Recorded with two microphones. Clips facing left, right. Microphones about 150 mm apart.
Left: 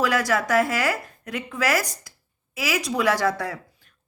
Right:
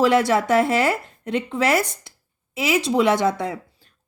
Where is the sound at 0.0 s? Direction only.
25° right (ahead or behind).